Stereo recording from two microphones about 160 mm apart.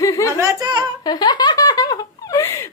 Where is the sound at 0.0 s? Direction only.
20° left (ahead or behind).